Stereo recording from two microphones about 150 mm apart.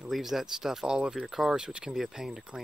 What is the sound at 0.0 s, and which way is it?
Speech, centre (ahead or behind).